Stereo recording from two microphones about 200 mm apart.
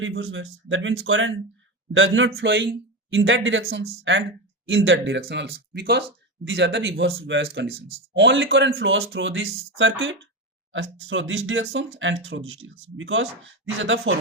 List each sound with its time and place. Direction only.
0.0 s speech: 80° right
5.2 s speech: 55° right (ahead or behind)
8.8 s speech: 75° right (ahead or behind)
12.6 s speech: 85° right
13.0 s speech: 75° right (ahead or behind)